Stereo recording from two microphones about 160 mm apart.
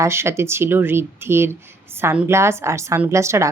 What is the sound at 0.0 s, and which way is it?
Speech, 15° right (ahead or behind).